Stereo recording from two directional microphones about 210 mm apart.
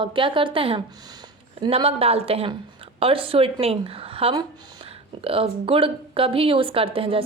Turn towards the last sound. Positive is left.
turn(degrees=-25)  # may be behind; listen again after turning